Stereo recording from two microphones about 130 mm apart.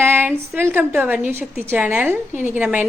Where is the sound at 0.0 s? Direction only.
15° right (ahead or behind).